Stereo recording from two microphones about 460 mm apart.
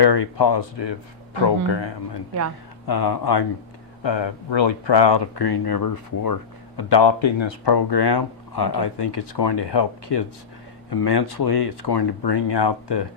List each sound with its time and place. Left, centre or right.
0.0 s speech: left
2.8 s speech: left
4.0 s speech: left